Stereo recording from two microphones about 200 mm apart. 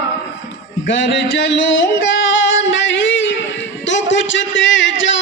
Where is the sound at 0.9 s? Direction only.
65° left (ahead or behind).